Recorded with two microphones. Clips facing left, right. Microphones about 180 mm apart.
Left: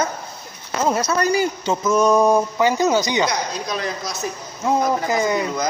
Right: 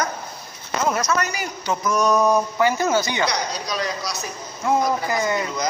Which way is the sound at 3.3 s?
50° left (ahead or behind).